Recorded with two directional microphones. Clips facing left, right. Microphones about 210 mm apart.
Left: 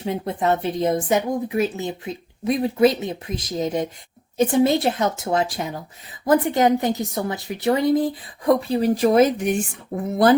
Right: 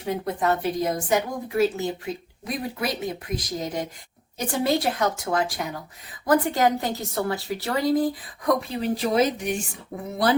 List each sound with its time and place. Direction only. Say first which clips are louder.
0.0 s a woman's voice: left 2 dB; 25° left (ahead or behind)
8.7 s speech: left 6 dB; 45° left (ahead or behind)